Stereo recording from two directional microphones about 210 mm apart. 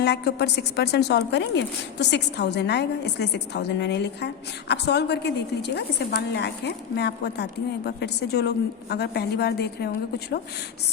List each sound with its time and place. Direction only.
0.0 s a woman's voice: 50° left (ahead or behind)